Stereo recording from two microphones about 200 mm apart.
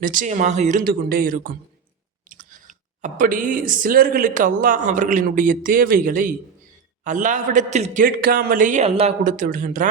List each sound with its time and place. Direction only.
0.0 s speech: 40° right (ahead or behind)